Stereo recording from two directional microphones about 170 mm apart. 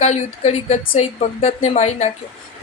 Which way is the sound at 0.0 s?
40° left (ahead or behind).